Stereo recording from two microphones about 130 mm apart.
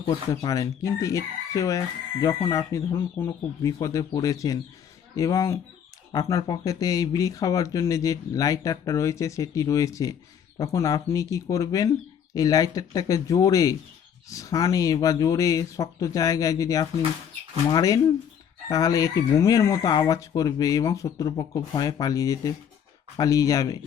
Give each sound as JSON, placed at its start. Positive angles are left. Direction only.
{"t": 0.0, "sound": "speech", "side_deg": 30}